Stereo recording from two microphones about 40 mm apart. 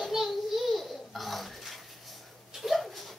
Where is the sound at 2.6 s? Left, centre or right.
Centre.